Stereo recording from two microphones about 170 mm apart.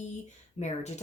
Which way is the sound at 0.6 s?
40° left (ahead or behind).